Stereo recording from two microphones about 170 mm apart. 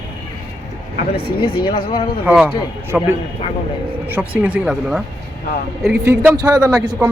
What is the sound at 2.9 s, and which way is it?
Speech, 5° right (ahead or behind).